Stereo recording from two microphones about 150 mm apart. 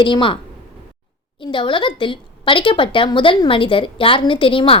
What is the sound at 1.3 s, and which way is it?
A woman's voice, 35° left (ahead or behind).